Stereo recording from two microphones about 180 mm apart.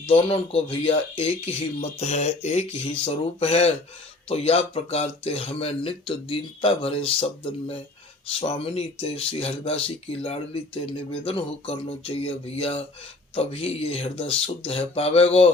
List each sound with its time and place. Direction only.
0.1 s speech: 30° left (ahead or behind)